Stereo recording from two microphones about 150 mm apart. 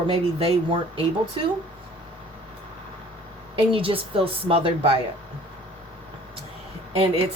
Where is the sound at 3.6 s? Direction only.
35° right (ahead or behind).